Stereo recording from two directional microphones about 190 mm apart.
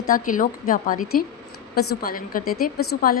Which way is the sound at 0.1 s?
45° left (ahead or behind).